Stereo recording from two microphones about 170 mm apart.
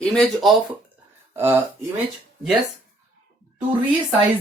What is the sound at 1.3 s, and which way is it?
Speech, 15° right (ahead or behind).